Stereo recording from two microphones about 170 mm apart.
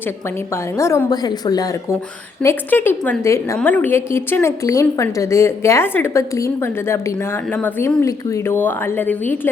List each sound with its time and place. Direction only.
0.5 s speech: 15° left (ahead or behind)